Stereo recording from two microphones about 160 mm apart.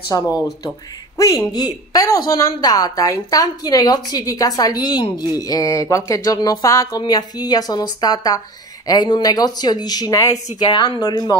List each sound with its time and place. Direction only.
0.1 s a woman's voice: 20° left (ahead or behind)